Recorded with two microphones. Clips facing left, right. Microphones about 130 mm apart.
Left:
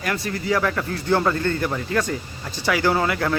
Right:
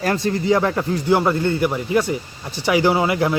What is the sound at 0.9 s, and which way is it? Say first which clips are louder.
Speech: right 3 dB; 15° right (ahead or behind).